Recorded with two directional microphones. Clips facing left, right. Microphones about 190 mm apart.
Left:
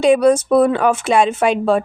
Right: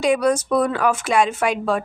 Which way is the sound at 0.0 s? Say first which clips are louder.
Left 6 dB; 25° left (ahead or behind).